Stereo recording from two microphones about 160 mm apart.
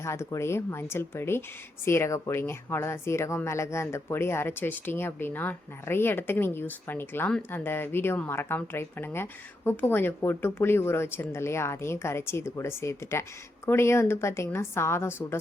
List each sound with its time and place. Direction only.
0.0 s speech: 15° left (ahead or behind)